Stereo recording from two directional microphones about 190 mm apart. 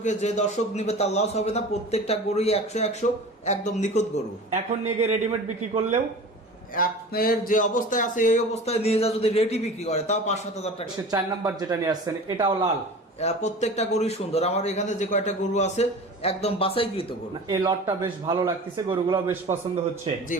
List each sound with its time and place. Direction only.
0.0 s a man's voice: 40° left (ahead or behind)
4.5 s a man's voice: 35° right (ahead or behind)
6.7 s a man's voice: 50° left (ahead or behind)
11.1 s a man's voice: 20° right (ahead or behind)
13.1 s a man's voice: 35° left (ahead or behind)
17.5 s a man's voice: 20° right (ahead or behind)